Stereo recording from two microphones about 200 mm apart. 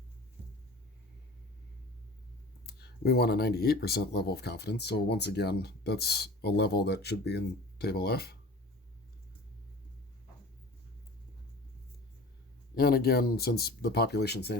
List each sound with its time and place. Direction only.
2.6 s speech: 55° left (ahead or behind)
12.7 s speech: 50° left (ahead or behind)